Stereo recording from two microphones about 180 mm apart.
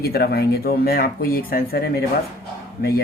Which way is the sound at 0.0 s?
60° left (ahead or behind).